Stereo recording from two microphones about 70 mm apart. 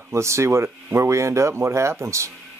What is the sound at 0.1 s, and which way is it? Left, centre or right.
Speech, right.